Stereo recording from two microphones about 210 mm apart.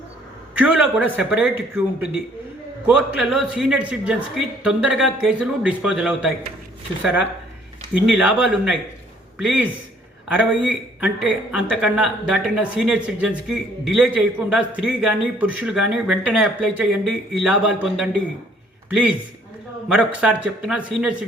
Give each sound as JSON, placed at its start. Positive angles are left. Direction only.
{"t": 0.6, "sound": "speech", "side_deg": -5}
{"t": 19.9, "sound": "speech", "side_deg": -5}